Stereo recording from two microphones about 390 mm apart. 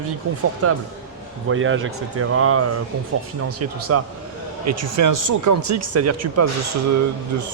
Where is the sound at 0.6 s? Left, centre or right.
Right.